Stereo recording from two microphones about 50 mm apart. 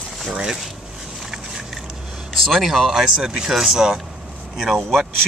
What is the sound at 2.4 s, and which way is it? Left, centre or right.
Speech, centre.